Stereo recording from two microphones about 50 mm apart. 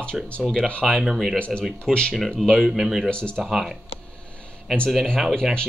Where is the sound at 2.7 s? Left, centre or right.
Centre.